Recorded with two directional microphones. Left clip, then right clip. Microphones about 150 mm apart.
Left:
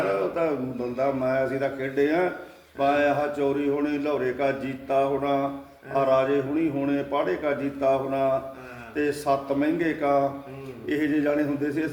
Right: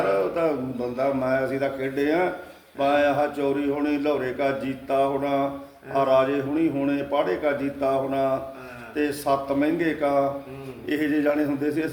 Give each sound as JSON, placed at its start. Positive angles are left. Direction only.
{"t": 0.9, "sound": "a man's voice", "side_deg": -30}